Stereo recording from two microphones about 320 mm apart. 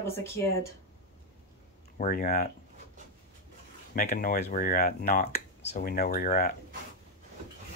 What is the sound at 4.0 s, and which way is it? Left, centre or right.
Speech, left.